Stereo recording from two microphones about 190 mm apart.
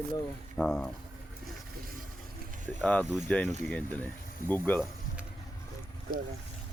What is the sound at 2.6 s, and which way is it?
Speech, 10° left (ahead or behind).